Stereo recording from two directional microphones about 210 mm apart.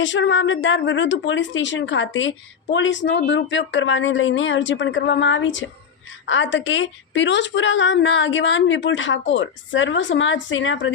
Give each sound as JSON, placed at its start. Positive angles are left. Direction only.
{"t": 0.0, "sound": "a woman's voice", "side_deg": 60}